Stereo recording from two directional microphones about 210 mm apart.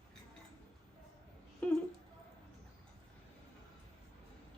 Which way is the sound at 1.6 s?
5° left (ahead or behind).